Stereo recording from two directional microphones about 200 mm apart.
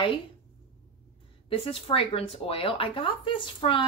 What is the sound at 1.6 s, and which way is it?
Speech, 30° left (ahead or behind).